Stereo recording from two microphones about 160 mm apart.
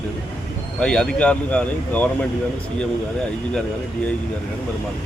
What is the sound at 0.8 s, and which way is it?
Speech, 5° left (ahead or behind).